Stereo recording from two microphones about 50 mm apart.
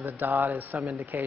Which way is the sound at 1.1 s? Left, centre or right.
Right.